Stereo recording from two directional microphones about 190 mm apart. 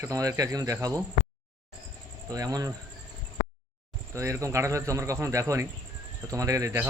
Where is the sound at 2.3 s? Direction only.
20° right (ahead or behind).